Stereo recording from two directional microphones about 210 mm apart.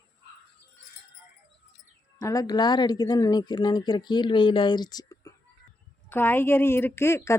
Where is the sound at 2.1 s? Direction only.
15° left (ahead or behind).